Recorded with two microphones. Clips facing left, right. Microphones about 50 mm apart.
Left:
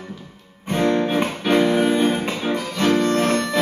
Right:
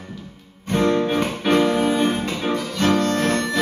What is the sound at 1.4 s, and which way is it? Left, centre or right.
Music, centre.